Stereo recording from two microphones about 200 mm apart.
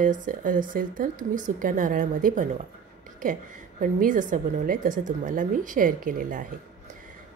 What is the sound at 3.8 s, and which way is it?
A woman's voice, 40° right (ahead or behind).